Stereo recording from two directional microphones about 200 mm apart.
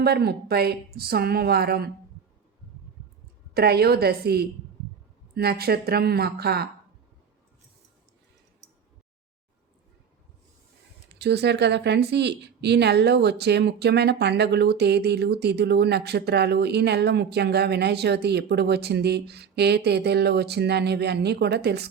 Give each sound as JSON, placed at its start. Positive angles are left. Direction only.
{"t": 0.0, "sound": "speech", "side_deg": -50}
{"t": 3.5, "sound": "speech", "side_deg": -50}
{"t": 11.1, "sound": "speech", "side_deg": -55}